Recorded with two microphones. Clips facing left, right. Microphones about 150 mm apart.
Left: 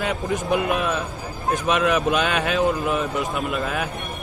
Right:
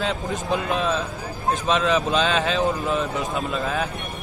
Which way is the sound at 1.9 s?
10° left (ahead or behind).